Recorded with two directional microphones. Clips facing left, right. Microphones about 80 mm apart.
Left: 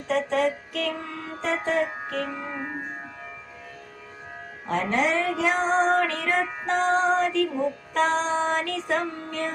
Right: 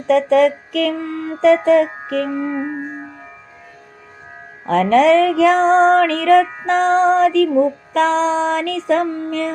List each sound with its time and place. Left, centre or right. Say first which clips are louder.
0.1 s music: right 11 dB; right
1.0 s speech: right 11 dB; right
1.4 s music: right 13 dB; right
2.0 s music: right 9 dB; right
2.3 s music: right 11 dB; right
4.6 s music: right 12 dB; right
7.9 s music: right 8 dB; right